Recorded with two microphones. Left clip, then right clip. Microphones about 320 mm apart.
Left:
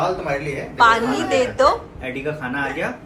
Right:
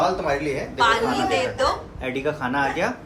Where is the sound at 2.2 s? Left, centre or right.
Right.